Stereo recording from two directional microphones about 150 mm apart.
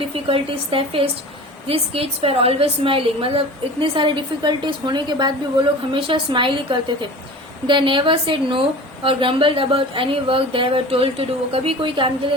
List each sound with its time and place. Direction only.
0.3 s a woman's voice: 35° right (ahead or behind)